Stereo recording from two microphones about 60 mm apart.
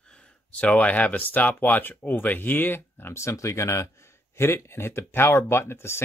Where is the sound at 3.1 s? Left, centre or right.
Left.